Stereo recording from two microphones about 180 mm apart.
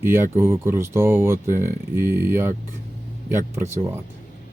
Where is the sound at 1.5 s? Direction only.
50° right (ahead or behind).